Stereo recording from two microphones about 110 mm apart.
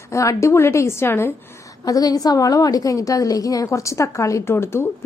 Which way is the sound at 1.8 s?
35° left (ahead or behind).